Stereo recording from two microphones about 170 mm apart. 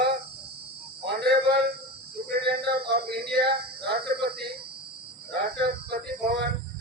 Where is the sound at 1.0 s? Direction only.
70° right (ahead or behind).